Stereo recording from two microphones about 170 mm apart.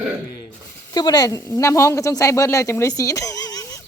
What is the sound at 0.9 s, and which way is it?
A woman's voice, 25° left (ahead or behind).